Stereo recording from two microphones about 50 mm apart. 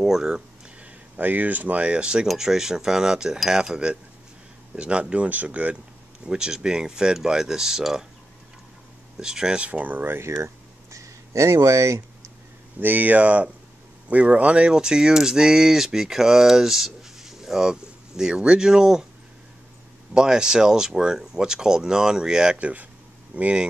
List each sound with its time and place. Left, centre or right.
0.0 s speech: centre
1.1 s speech: right
6.2 s speech: centre
9.1 s speech: centre
9.7 s speech: right
10.2 s a sound: right
12.8 s speech: right; by 19.0 s centre
20.2 s speech: centre